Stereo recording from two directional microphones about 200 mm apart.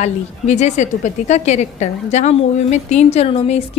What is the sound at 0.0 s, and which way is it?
A woman's voice, 35° left (ahead or behind).